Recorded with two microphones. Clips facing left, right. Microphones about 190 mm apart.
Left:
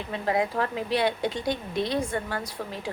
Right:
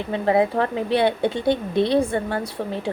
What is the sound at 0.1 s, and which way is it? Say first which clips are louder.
Speech: right 7 dB; 25° right (ahead or behind).